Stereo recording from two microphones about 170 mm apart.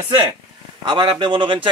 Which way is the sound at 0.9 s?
25° right (ahead or behind).